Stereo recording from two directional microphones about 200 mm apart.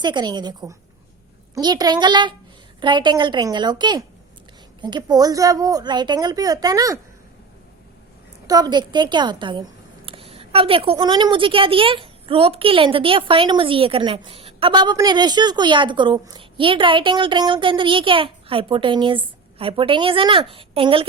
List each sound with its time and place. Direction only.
0.0 s a woman's voice: 20° right (ahead or behind)
8.4 s a woman's voice: 20° right (ahead or behind)